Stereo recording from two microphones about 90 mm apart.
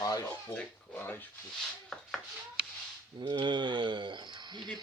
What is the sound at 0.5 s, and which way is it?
Speech, 15° left (ahead or behind).